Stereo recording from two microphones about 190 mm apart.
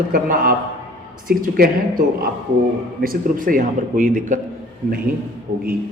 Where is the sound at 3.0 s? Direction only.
50° right (ahead or behind).